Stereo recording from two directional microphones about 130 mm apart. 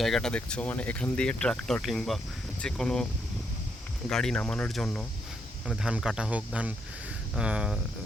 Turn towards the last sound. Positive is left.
turn(degrees=-5)  # may be behind; listen again after turning